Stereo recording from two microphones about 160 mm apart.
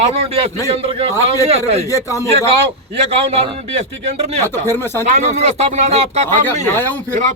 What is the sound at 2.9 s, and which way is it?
A man's voice, 35° right (ahead or behind).